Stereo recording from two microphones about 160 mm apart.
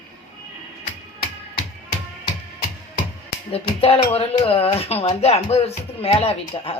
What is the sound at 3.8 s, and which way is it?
Speech, 35° left (ahead or behind).